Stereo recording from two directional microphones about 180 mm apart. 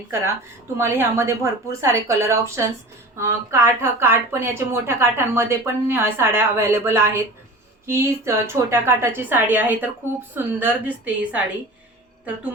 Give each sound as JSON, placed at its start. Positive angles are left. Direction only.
{"t": 0.8, "sound": "a woman's voice", "side_deg": -15}